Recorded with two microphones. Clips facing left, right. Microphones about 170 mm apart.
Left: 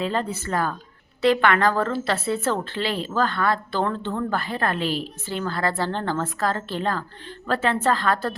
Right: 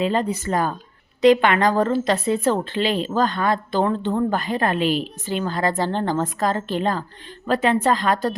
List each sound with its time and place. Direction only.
0.0 s a woman's voice: 15° right (ahead or behind)